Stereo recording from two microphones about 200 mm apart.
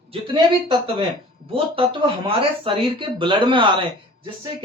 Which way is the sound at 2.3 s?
25° right (ahead or behind).